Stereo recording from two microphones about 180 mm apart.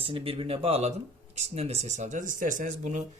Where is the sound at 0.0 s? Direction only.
30° right (ahead or behind).